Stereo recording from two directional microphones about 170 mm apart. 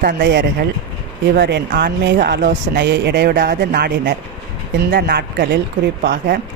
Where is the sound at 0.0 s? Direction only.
90° right; by 5.5 s 65° right (ahead or behind).